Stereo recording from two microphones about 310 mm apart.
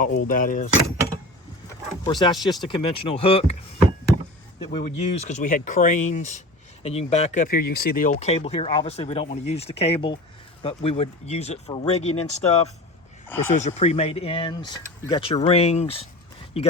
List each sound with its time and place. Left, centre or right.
0.0 s speech: left
2.0 s speech: centre
4.8 s speech: left
13.2 s speech: centre
13.5 s speech: left